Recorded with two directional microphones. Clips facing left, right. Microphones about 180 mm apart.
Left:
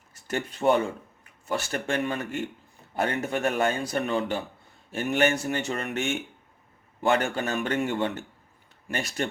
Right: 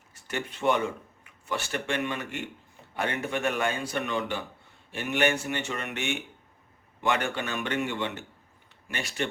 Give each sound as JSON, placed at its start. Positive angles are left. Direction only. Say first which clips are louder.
{"t": 0.1, "sound": "a man's voice", "louder": "left 3 dB", "side_deg": 40}